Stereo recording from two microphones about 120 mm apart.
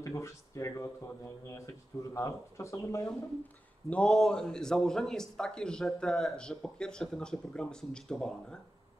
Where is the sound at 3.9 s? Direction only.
5° left (ahead or behind).